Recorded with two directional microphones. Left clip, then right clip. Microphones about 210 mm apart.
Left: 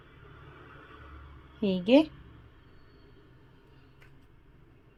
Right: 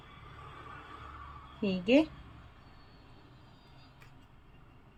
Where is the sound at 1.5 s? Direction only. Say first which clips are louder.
Left 4 dB; 30° left (ahead or behind).